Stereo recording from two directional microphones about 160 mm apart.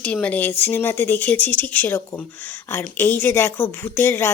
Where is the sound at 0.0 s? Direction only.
10° left (ahead or behind).